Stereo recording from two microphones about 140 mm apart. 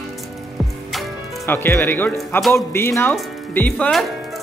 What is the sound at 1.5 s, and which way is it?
Speech, 15° left (ahead or behind).